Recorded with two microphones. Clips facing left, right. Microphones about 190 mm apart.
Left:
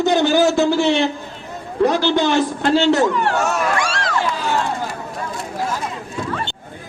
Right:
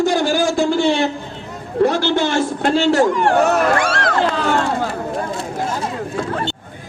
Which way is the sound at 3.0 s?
45° right (ahead or behind).